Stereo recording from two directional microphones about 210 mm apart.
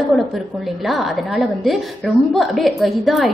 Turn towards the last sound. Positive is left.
turn(degrees=0)  # may be behind; listen again after turning